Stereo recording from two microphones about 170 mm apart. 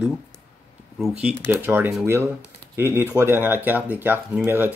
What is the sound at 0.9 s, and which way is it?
Speech, 5° right (ahead or behind).